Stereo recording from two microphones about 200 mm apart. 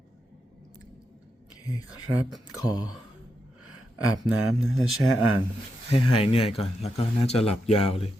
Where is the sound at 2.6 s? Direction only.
20° left (ahead or behind).